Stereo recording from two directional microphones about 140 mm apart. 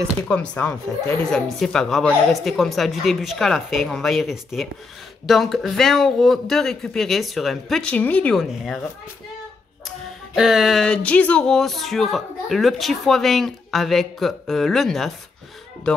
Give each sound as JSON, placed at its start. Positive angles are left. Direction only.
{"t": 0.2, "sound": "speech", "side_deg": 10}
{"t": 8.4, "sound": "speech", "side_deg": 0}
{"t": 10.3, "sound": "speech", "side_deg": -5}